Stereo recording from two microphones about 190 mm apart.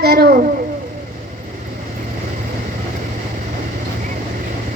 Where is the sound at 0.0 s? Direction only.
55° right (ahead or behind).